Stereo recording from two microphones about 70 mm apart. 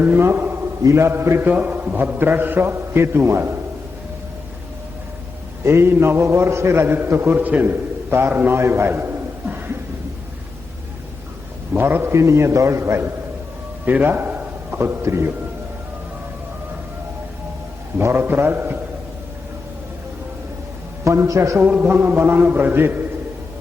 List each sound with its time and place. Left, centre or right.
0.0 s a man's voice: right
0.4 s a sound: right
0.9 s a man's voice: right
1.4 s a man's voice: right
5.6 s a man's voice: right
8.5 s a sound: right
11.8 s a man's voice: right
12.1 s a man's voice: right
13.8 s a sound: right
14.8 s a man's voice: right
17.9 s a man's voice: right
21.0 s a man's voice: right
21.6 s a man's voice: right